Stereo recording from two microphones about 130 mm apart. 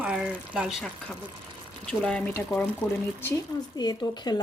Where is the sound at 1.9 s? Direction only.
5° left (ahead or behind).